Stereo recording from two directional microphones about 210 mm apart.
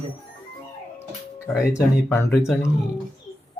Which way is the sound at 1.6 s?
15° left (ahead or behind).